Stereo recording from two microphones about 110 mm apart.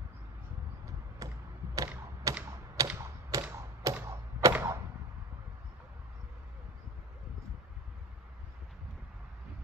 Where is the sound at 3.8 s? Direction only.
30° right (ahead or behind).